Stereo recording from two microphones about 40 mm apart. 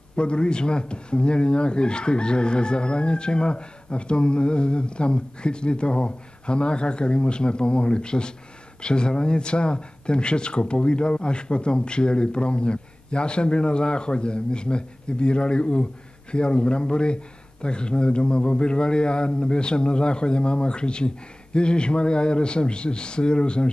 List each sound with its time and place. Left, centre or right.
0.1 s speech: left